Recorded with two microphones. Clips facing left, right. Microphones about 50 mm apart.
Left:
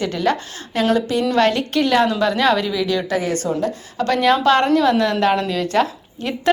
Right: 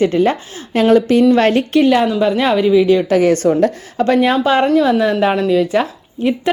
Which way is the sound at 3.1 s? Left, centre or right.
Right.